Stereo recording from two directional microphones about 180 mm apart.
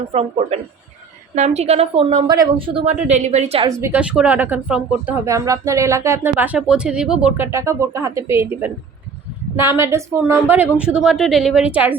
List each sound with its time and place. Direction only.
0.1 s a woman's voice: 35° right (ahead or behind)
3.7 s speech: 15° right (ahead or behind)
5.2 s a woman's voice: 15° right (ahead or behind)